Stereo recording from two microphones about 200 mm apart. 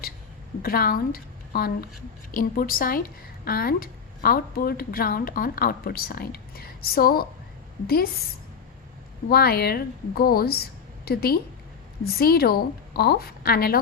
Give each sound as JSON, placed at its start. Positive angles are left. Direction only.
{"t": 0.6, "sound": "a woman's voice", "side_deg": 45}
{"t": 9.3, "sound": "a woman's voice", "side_deg": 50}